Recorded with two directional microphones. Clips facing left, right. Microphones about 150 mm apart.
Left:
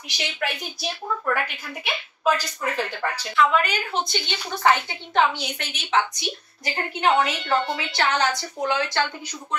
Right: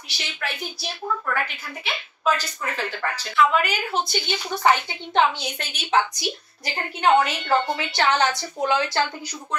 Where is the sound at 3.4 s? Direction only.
10° right (ahead or behind).